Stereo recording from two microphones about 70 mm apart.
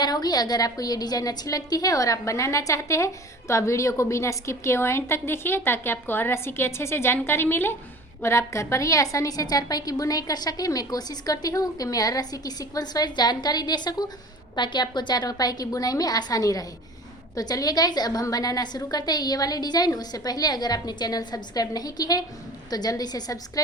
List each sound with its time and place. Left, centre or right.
0.0 s a woman's voice: left